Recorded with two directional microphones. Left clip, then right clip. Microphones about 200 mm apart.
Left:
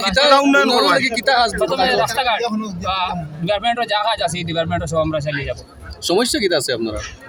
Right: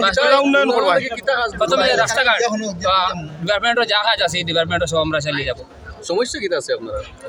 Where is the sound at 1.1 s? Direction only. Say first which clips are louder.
Left 4 dB; 55° left (ahead or behind).